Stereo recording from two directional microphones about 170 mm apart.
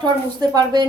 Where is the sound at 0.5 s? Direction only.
25° right (ahead or behind).